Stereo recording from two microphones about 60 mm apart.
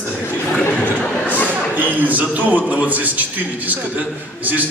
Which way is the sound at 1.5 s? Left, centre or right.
Right.